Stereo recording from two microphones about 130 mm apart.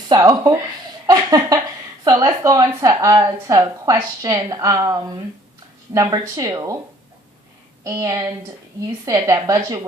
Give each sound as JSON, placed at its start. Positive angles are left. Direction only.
{"t": 0.1, "sound": "speech", "side_deg": -30}
{"t": 1.0, "sound": "a sound", "side_deg": -30}
{"t": 2.0, "sound": "speech", "side_deg": -25}
{"t": 7.9, "sound": "speech", "side_deg": -30}